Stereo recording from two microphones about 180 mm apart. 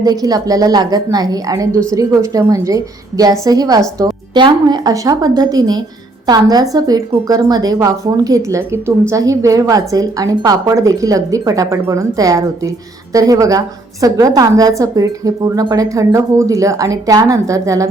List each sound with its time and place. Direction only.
0.0 s a woman's voice: 20° right (ahead or behind)